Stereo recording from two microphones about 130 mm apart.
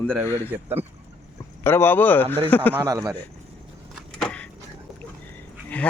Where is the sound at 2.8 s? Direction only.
25° right (ahead or behind).